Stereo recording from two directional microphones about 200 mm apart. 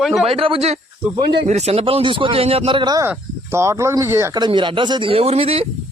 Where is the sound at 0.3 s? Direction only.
25° right (ahead or behind).